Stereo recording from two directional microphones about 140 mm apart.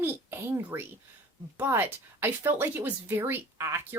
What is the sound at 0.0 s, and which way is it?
A child's voice, 15° right (ahead or behind).